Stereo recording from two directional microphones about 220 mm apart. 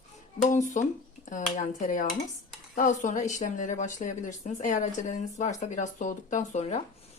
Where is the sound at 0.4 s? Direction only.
35° left (ahead or behind).